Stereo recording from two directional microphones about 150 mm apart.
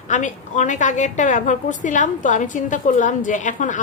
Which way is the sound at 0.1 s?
55° left (ahead or behind).